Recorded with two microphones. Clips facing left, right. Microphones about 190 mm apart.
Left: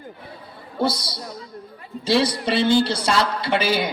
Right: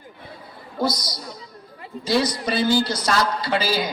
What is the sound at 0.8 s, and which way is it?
A woman's voice, 30° left (ahead or behind).